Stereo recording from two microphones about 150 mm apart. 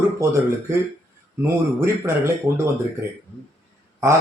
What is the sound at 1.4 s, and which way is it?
Speech, 20° right (ahead or behind).